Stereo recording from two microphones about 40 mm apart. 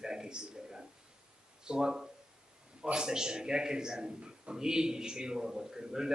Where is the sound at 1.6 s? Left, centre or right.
Centre.